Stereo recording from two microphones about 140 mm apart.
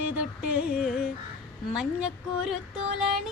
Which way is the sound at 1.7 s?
5° right (ahead or behind).